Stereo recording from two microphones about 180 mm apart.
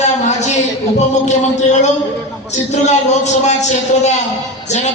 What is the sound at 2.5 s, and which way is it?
A man's voice, 40° left (ahead or behind).